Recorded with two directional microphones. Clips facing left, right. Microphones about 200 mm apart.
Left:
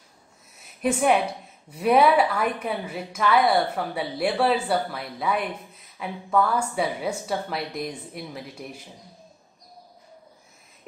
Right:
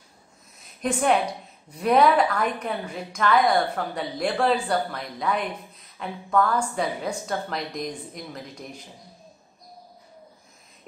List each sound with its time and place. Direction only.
0.8 s a woman's voice: 5° left (ahead or behind)